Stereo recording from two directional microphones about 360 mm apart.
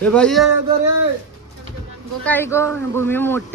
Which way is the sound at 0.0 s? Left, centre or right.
Centre.